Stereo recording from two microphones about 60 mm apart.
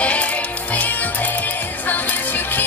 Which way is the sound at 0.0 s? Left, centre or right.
Left.